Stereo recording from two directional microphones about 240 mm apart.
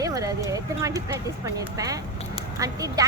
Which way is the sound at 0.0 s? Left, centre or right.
Centre.